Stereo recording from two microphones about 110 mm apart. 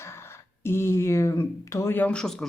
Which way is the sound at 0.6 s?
25° left (ahead or behind).